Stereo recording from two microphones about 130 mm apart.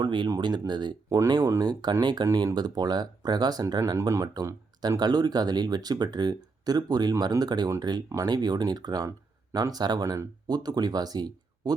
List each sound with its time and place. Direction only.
0.0 s speech: 35° right (ahead or behind)